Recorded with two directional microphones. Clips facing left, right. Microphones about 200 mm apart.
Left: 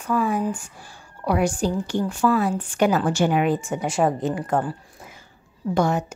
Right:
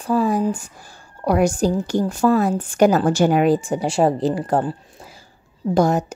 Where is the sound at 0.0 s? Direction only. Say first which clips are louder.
Right 4 dB; 35° right (ahead or behind).